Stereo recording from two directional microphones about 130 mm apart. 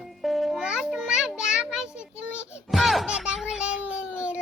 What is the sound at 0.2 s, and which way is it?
Music, centre (ahead or behind).